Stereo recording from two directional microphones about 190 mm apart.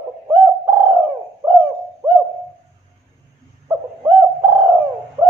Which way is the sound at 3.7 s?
15° right (ahead or behind).